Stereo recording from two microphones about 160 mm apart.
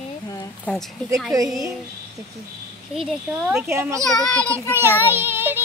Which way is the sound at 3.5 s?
15° right (ahead or behind).